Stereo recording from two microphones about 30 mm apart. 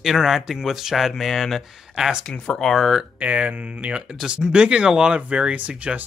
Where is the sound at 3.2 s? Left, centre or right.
Right.